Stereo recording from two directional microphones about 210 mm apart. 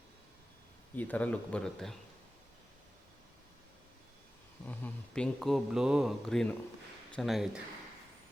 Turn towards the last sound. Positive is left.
turn(degrees=0)  # may be behind; listen again after turning